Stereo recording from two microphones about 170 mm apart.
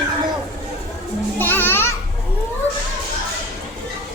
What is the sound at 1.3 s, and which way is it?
Music, 10° left (ahead or behind).